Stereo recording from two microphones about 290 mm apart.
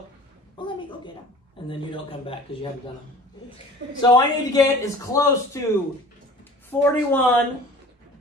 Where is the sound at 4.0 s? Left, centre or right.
Centre.